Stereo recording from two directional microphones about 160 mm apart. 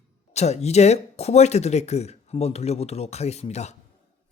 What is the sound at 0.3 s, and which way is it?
Speech, 45° left (ahead or behind).